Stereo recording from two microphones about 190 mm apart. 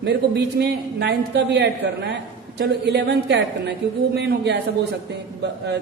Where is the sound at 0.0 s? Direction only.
65° right (ahead or behind).